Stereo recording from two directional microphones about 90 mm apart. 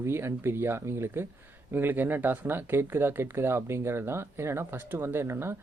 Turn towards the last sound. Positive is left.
turn(degrees=-30)  # may be behind; listen again after turning